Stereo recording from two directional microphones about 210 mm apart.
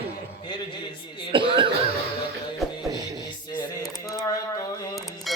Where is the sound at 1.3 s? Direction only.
25° right (ahead or behind).